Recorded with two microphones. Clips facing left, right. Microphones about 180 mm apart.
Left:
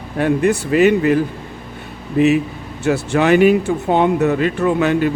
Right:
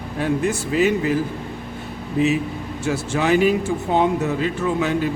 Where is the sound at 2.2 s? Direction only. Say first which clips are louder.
Left 5 dB; 65° left (ahead or behind).